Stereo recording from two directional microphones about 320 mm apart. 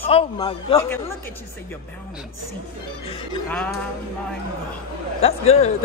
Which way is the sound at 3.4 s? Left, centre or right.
Centre.